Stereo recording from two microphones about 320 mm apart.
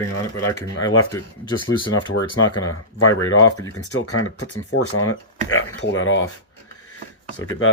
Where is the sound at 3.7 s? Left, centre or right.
Left.